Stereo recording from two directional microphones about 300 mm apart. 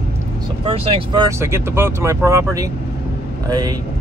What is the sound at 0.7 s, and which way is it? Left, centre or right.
Speech, centre.